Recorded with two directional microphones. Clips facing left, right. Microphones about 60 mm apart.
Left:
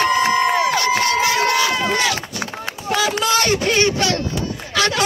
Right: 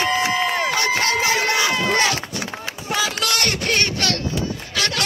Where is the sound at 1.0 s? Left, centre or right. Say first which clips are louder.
Left 2 dB; right.